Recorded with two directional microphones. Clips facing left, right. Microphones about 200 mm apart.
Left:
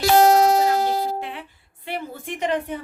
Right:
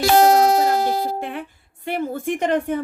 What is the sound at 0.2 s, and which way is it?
Speech, 60° right (ahead or behind).